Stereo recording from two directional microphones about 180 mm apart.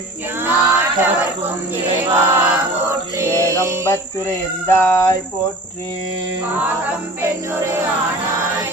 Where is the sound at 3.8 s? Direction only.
15° left (ahead or behind).